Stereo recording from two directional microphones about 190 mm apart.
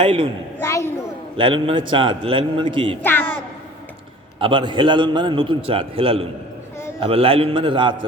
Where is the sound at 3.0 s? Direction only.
10° left (ahead or behind).